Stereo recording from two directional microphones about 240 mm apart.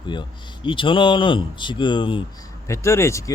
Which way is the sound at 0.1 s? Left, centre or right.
Centre.